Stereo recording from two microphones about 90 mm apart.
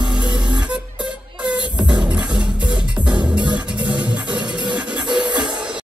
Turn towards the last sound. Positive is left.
turn(degrees=-10)  # may be behind; listen again after turning